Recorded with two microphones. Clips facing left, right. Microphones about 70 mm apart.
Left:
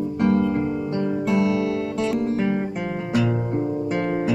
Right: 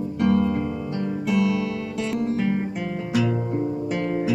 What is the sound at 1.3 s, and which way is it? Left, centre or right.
Music, left.